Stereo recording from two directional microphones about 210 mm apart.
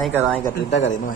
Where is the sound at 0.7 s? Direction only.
35° left (ahead or behind).